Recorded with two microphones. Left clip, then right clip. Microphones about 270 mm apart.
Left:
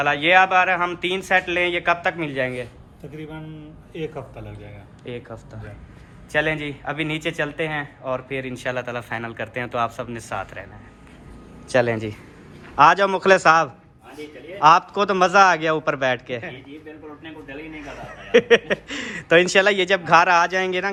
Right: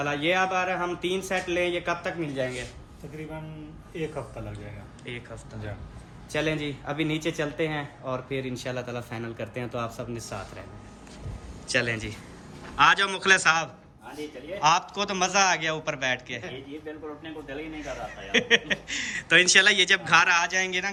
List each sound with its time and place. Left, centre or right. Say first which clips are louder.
0.0 s a man's voice: left 9 dB; centre
2.3 s a man's voice: left 6 dB; left
5.1 s speech: left 5 dB; centre
6.3 s a man's voice: left 6 dB; centre
11.7 s a man's voice: left 7 dB; centre
17.5 s a man's voice: even; centre